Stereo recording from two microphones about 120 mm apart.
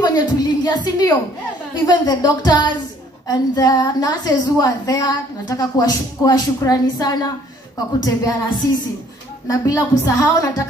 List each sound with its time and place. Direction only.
0.0 s a woman's voice: 35° left (ahead or behind)